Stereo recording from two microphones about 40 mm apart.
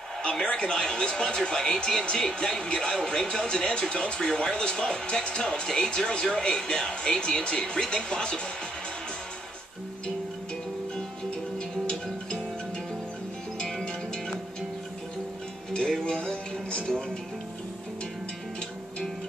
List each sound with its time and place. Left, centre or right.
0.2 s speech: left
11.2 s music: left
16.0 s music: left